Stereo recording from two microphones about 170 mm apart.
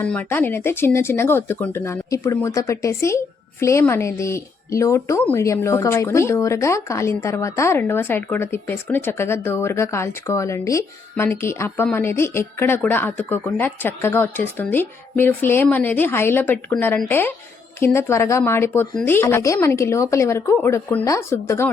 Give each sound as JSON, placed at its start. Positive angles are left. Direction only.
{"t": 0.0, "sound": "speech", "side_deg": 10}